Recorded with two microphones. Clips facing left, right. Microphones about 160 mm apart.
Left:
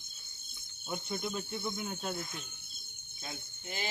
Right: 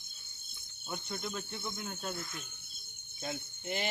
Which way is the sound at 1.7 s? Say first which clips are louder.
Left 3 dB; 15° left (ahead or behind).